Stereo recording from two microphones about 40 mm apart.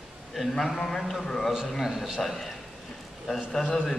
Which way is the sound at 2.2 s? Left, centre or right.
Centre.